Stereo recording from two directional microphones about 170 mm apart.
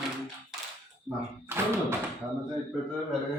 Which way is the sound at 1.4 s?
15° right (ahead or behind).